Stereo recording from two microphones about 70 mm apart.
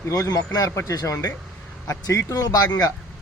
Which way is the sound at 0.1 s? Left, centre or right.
Left.